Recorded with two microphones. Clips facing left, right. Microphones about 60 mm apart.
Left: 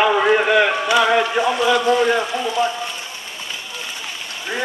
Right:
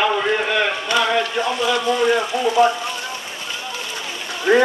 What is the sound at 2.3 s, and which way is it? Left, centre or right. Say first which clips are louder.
Speech: right 3 dB; centre.